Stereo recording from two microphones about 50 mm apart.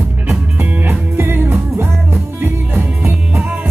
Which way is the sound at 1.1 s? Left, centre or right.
Right.